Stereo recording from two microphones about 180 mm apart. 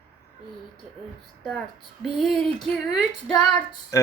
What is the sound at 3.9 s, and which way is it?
Music, 15° left (ahead or behind).